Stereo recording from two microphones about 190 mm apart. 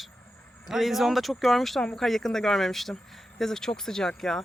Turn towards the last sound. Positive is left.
turn(degrees=5)  # may be behind; listen again after turning